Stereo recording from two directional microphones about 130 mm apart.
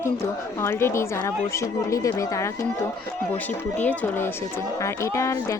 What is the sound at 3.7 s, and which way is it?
Speech, 15° left (ahead or behind).